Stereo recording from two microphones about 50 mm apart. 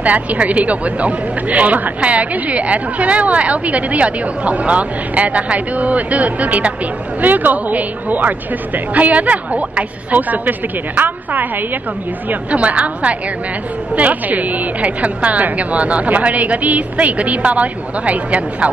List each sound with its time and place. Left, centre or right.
0.0 s a woman's voice: right